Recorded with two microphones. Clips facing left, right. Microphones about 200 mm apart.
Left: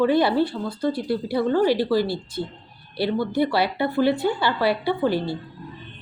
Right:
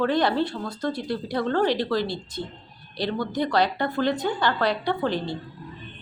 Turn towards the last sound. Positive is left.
turn(degrees=5)  # may be behind; listen again after turning